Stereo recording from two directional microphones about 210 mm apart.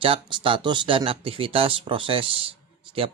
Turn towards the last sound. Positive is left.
turn(degrees=-25)  # may be behind; listen again after turning